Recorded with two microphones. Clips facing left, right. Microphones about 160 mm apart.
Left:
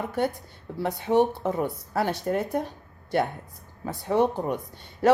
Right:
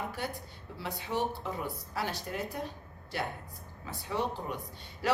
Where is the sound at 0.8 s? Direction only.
55° left (ahead or behind).